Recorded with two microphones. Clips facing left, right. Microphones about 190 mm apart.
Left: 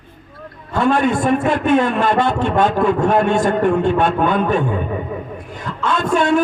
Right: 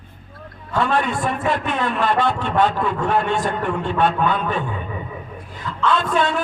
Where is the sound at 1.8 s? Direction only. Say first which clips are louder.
Left 5 dB; 45° left (ahead or behind).